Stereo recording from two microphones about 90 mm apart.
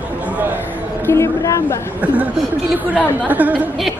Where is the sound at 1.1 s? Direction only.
35° left (ahead or behind).